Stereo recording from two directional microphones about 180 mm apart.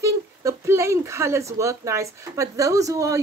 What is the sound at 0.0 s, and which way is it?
Speech, 15° right (ahead or behind).